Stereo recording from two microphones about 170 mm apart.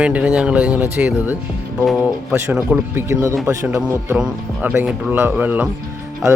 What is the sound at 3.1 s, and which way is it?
Speech, 15° right (ahead or behind).